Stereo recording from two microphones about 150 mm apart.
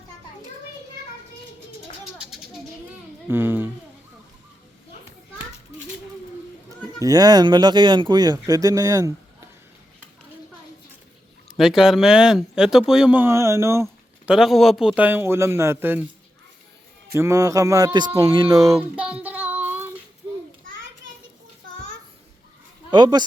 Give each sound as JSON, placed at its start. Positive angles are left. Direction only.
{"t": 2.1, "sound": "children playing", "side_deg": -5}
{"t": 3.2, "sound": "speech", "side_deg": -15}
{"t": 6.7, "sound": "speech", "side_deg": -25}
{"t": 11.5, "sound": "speech", "side_deg": -5}
{"t": 13.8, "sound": "speech", "side_deg": -5}
{"t": 17.2, "sound": "speech", "side_deg": -20}
{"t": 18.6, "sound": "child singing", "side_deg": -5}
{"t": 22.9, "sound": "speech", "side_deg": -30}